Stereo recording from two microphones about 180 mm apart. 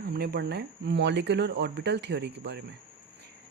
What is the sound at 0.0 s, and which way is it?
Speech, 60° right (ahead or behind).